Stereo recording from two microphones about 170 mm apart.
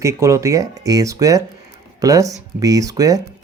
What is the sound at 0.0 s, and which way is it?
Speech, 15° right (ahead or behind).